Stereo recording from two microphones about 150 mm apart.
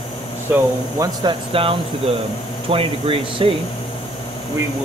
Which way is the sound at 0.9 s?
25° right (ahead or behind).